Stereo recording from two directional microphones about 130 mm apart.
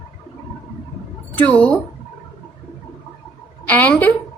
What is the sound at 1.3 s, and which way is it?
Speech, 10° left (ahead or behind).